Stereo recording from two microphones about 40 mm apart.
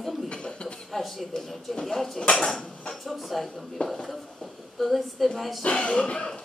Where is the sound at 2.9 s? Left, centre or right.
Centre.